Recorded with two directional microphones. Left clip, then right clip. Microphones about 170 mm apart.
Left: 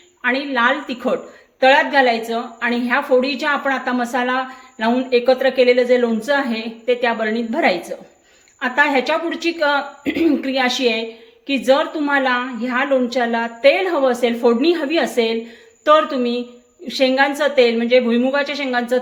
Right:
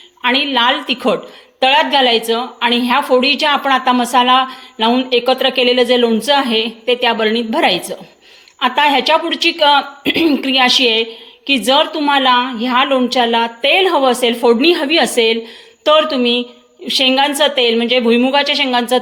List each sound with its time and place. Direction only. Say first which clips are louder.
0.2 s a woman's voice: right 4 dB; 25° right (ahead or behind)